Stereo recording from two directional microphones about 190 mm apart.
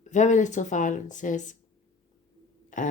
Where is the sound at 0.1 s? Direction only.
40° left (ahead or behind).